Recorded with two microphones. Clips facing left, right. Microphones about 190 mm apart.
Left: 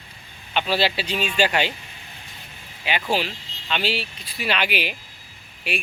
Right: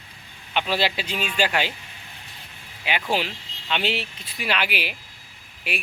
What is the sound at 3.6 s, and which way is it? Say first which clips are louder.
Speech: even; 20° right (ahead or behind).